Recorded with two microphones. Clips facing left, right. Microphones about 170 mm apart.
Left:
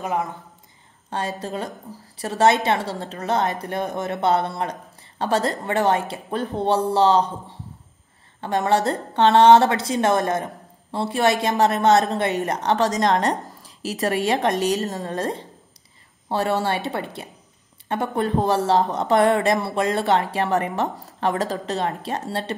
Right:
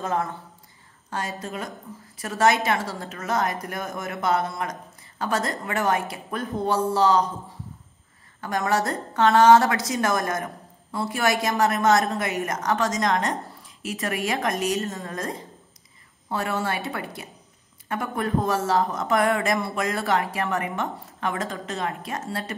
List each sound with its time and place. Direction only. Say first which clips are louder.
0.0 s speech: left 1 dB; 15° left (ahead or behind)
1.1 s a woman's voice: left 4 dB; 30° left (ahead or behind)
8.4 s a woman's voice: left 4 dB; 30° left (ahead or behind)
12.4 s a woman's voice: left 4 dB; 35° left (ahead or behind)